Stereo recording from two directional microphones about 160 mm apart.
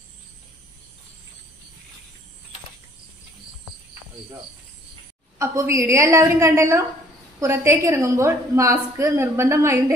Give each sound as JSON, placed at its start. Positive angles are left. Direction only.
{"t": 5.4, "sound": "a woman's voice", "side_deg": -15}